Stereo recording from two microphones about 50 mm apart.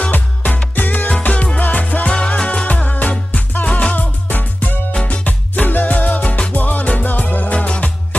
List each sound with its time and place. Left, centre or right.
0.0 s music: left
7.5 s music: left